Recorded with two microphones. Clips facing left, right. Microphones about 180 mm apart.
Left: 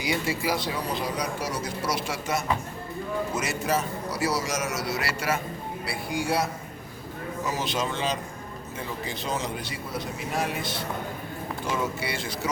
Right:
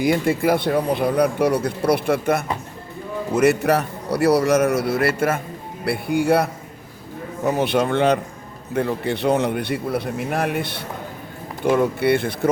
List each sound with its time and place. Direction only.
0.0 s speech: 55° right (ahead or behind)